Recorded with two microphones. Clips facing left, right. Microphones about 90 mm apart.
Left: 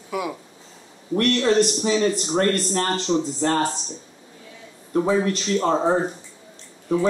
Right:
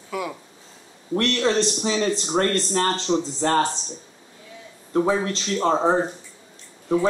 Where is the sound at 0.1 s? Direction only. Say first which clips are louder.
Left 2 dB; 15° left (ahead or behind).